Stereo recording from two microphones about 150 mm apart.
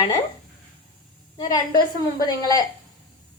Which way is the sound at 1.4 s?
25° left (ahead or behind).